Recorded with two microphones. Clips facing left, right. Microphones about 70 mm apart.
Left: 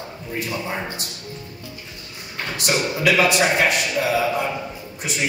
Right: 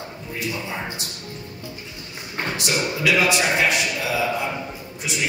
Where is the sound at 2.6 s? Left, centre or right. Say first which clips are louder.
Left 4 dB; left.